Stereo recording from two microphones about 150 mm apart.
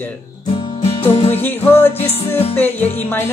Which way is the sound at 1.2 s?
15° left (ahead or behind).